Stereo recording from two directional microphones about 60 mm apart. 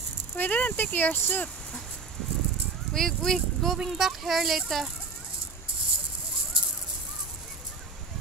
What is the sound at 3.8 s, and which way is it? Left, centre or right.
Speech, centre.